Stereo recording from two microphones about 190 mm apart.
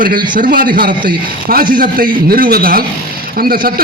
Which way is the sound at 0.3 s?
45° right (ahead or behind).